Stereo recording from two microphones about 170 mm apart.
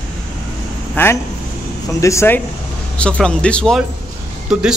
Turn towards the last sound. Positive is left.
turn(degrees=-5)  # may be behind; listen again after turning